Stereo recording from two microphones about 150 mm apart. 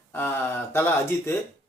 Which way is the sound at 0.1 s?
15° left (ahead or behind).